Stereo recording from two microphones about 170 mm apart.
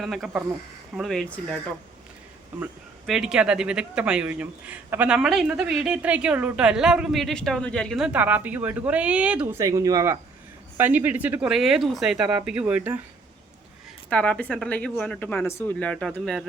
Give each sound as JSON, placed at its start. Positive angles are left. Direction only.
{"t": 0.0, "sound": "speech", "side_deg": 0}
{"t": 3.1, "sound": "speech", "side_deg": -5}
{"t": 9.6, "sound": "speech", "side_deg": -20}
{"t": 14.1, "sound": "speech", "side_deg": 10}